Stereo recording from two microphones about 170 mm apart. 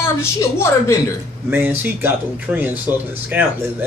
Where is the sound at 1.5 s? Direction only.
10° right (ahead or behind).